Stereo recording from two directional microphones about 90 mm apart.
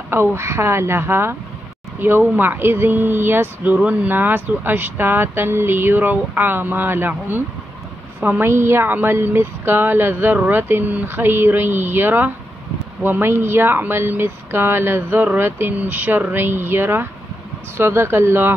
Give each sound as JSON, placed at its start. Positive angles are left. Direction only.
{"t": 0.1, "sound": "speech", "side_deg": -25}